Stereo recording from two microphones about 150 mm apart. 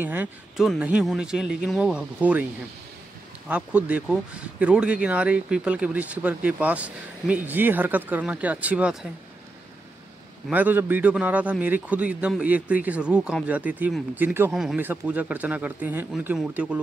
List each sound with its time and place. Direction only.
0.0 s speech: 10° right (ahead or behind)
3.4 s speech: 10° right (ahead or behind)
10.5 s speech: 10° right (ahead or behind)
14.5 s speech: centre (ahead or behind)